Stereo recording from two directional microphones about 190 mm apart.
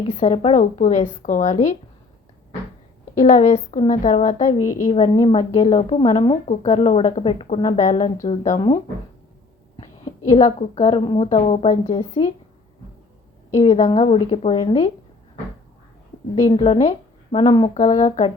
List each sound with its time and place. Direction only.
0.1 s a woman's voice: 35° left (ahead or behind)
3.2 s a woman's voice: 40° left (ahead or behind)
4.9 s a woman's voice: 30° left (ahead or behind)
10.2 s a woman's voice: 35° left (ahead or behind)
11.3 s a woman's voice: 40° left (ahead or behind)
13.7 s a woman's voice: 35° left (ahead or behind)
16.5 s a woman's voice: 30° left (ahead or behind)